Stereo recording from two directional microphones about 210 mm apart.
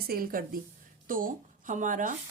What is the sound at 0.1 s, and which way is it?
Speech, 45° right (ahead or behind).